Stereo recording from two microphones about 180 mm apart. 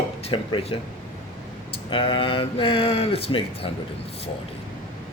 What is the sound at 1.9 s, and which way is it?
Speech, 30° left (ahead or behind).